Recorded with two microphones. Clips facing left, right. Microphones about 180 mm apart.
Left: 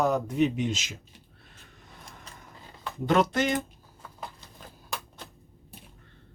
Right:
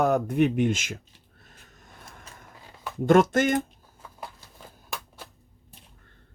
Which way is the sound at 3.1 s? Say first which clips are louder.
Right 5 dB; 50° right (ahead or behind).